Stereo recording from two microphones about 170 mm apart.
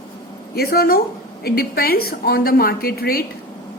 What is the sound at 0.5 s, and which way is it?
A woman's voice, 65° left (ahead or behind).